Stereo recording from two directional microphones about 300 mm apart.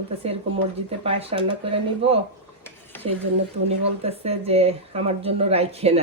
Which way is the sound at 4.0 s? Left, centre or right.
Centre.